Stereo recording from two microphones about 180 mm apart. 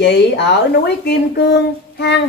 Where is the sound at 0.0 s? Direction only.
70° left (ahead or behind).